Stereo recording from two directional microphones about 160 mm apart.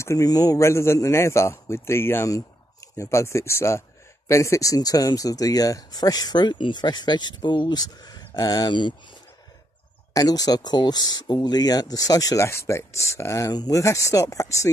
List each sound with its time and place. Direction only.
0.0 s a man's voice: 20° left (ahead or behind)
10.1 s speech: 25° left (ahead or behind)